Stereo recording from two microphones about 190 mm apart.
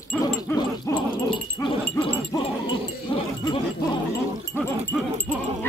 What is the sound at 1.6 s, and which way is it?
Wind chime, 25° left (ahead or behind).